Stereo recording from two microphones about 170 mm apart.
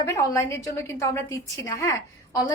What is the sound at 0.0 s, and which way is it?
A woman's voice, 15° left (ahead or behind).